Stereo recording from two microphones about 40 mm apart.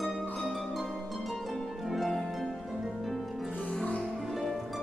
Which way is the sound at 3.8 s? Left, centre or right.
Left.